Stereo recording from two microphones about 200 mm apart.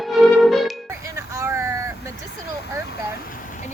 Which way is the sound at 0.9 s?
15° right (ahead or behind).